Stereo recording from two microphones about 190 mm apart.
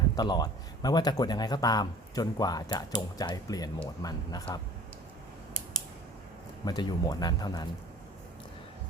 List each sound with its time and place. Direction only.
0.2 s speech: 20° left (ahead or behind)
6.7 s speech: 20° left (ahead or behind)